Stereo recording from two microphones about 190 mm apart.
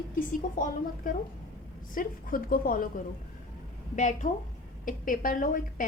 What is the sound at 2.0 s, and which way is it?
Speech, 45° left (ahead or behind).